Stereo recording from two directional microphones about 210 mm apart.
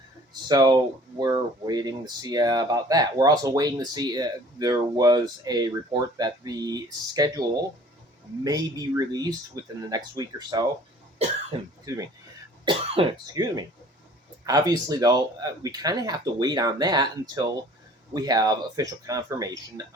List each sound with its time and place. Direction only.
0.4 s speech: 20° right (ahead or behind)
8.4 s speech: 20° right (ahead or behind)
11.2 s speech: 30° right (ahead or behind)
12.6 s speech: 25° right (ahead or behind)